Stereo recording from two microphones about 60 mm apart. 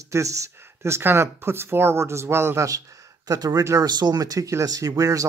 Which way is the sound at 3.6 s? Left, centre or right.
Right.